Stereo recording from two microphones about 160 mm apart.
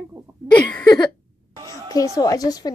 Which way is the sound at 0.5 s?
10° left (ahead or behind).